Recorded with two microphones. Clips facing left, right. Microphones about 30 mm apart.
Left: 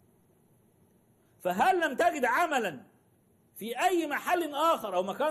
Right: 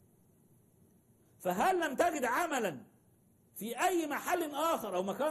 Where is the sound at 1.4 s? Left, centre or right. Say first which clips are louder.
Left 4 dB; left.